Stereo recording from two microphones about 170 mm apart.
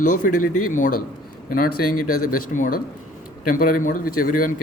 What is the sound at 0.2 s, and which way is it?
Speech, 50° left (ahead or behind).